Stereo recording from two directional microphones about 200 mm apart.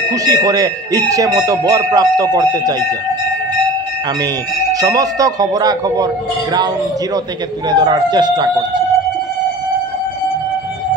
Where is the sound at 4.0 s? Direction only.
20° right (ahead or behind).